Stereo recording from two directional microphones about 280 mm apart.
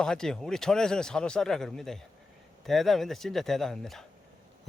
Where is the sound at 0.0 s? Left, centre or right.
Centre.